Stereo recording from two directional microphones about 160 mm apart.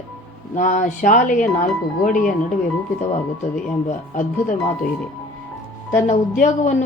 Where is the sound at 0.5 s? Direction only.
50° left (ahead or behind).